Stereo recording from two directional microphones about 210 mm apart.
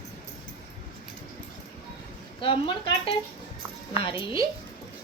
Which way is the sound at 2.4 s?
25° left (ahead or behind).